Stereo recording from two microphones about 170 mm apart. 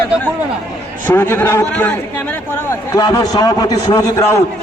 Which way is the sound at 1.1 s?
15° left (ahead or behind).